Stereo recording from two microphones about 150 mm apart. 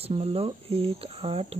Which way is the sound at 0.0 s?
40° right (ahead or behind).